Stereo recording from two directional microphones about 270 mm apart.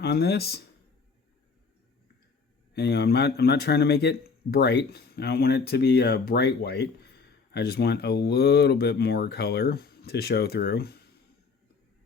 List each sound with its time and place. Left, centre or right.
0.0 s speech: left
2.7 s speech: left